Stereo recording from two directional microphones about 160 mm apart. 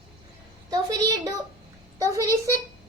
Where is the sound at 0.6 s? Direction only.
20° right (ahead or behind).